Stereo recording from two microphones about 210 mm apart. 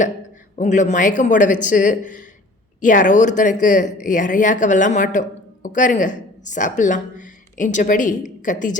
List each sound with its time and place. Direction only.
0.5 s a woman's voice: 35° left (ahead or behind)